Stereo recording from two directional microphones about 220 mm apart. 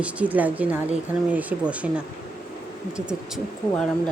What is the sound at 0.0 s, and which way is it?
Speech, 5° right (ahead or behind).